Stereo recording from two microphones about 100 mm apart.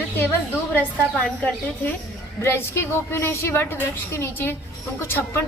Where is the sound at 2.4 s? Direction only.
25° left (ahead or behind).